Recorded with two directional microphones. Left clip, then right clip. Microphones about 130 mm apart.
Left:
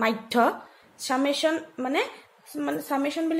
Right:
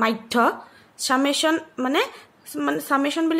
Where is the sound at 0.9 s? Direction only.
30° right (ahead or behind).